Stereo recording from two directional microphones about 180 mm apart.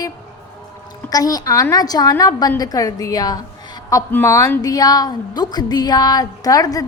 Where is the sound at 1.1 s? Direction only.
20° left (ahead or behind).